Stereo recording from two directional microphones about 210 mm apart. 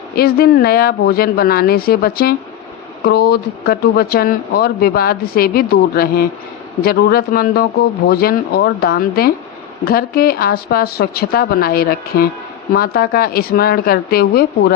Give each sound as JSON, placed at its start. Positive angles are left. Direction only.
{"t": 0.2, "sound": "speech", "side_deg": 45}